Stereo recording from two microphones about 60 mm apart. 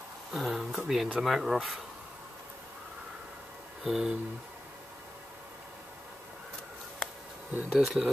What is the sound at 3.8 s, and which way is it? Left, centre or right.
Speech, centre.